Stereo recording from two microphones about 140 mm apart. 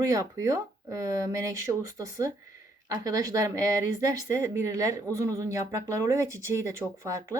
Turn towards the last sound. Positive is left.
turn(degrees=-20)  # may be behind; listen again after turning